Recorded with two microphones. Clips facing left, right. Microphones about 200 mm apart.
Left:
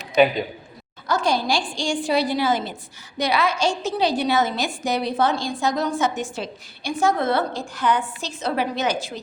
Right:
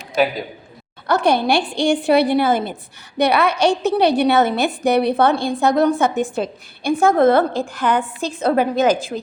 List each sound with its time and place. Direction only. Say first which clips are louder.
0.2 s a man's voice: left 1 dB; 5° right (ahead or behind)
1.0 s a woman's voice: right 5 dB; 60° right (ahead or behind)